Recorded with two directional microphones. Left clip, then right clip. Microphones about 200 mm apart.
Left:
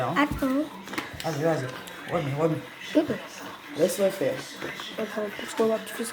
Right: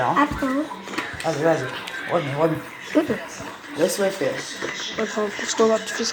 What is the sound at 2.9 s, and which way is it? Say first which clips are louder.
Speech: right 3 dB; 10° left (ahead or behind).